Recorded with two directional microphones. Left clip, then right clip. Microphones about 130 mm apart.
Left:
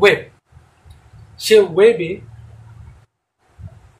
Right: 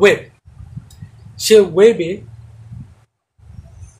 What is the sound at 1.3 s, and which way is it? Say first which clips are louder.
Speech: right 2 dB; 90° right.